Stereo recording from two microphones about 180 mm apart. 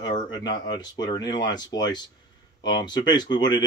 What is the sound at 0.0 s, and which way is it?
Speech, 25° left (ahead or behind).